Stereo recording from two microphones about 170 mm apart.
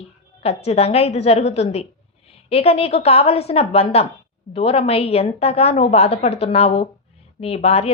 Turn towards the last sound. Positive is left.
turn(degrees=35)  # may be behind; listen again after turning